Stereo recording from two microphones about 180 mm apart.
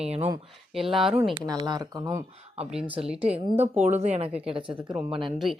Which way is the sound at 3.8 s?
40° right (ahead or behind).